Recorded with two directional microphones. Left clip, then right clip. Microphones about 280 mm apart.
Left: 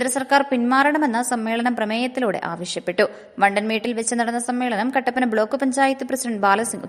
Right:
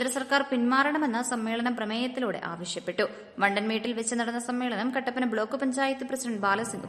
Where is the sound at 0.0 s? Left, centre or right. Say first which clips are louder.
Left 8 dB; left.